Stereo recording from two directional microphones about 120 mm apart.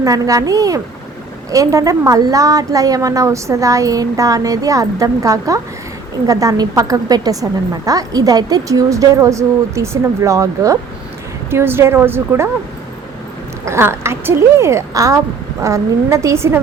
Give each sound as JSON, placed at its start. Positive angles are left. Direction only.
{"t": 0.0, "sound": "a woman's voice", "side_deg": -30}
{"t": 13.7, "sound": "a woman's voice", "side_deg": -20}